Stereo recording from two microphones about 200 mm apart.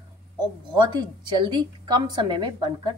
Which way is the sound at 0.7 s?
20° right (ahead or behind).